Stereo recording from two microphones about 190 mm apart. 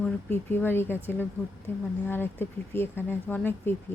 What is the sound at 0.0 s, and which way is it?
Speech, 10° left (ahead or behind).